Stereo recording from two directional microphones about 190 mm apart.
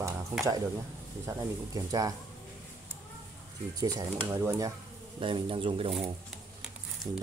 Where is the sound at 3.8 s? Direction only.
20° right (ahead or behind).